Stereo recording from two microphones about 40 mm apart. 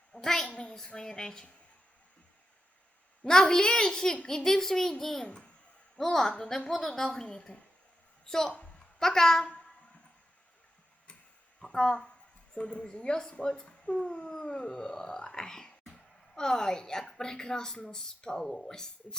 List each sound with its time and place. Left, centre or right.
0.1 s a woman's voice: centre
0.5 s a child's voice: left
3.2 s a woman's voice: centre
5.2 s speech: left
6.0 s a woman's voice: centre
8.3 s a woman's voice: centre
8.5 s a sound: left
9.0 s a woman's voice: centre
11.6 s a woman's voice: centre